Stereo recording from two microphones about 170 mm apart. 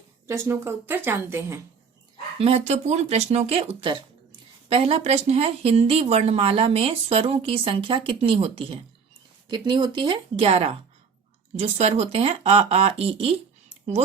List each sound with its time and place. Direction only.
0.3 s a woman's voice: 15° right (ahead or behind)
2.4 s speech: 35° right (ahead or behind)